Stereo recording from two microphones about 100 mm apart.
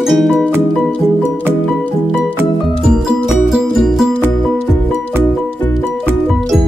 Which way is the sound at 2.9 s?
5° right (ahead or behind).